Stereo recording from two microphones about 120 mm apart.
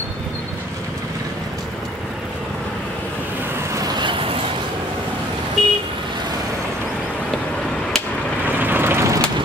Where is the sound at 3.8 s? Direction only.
35° right (ahead or behind).